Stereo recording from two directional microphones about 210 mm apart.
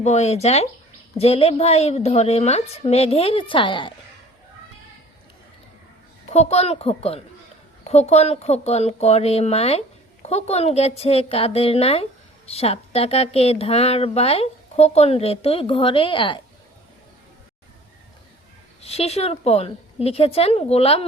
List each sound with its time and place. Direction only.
0.0 s a woman's voice: 30° left (ahead or behind)
6.3 s a woman's voice: 30° left (ahead or behind)
18.8 s speech: 30° left (ahead or behind)